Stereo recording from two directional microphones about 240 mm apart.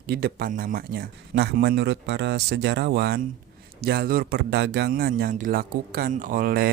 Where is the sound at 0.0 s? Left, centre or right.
Right.